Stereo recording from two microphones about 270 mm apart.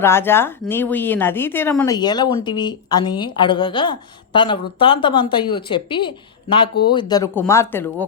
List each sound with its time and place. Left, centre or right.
0.0 s speech: centre